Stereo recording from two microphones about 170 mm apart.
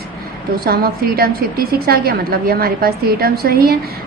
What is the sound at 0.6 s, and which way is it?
A woman's voice, 65° right (ahead or behind).